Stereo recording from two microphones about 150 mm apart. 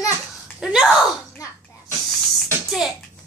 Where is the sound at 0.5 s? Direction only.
Centre (ahead or behind).